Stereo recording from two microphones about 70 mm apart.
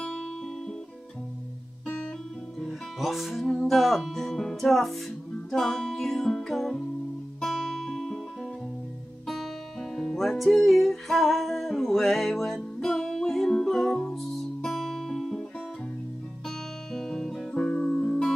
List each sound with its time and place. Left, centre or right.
2.6 s music: centre
9.3 s music: centre
16.4 s guitar: centre